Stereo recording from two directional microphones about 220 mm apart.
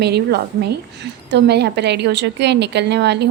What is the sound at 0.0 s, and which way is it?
A woman's voice, 50° right (ahead or behind).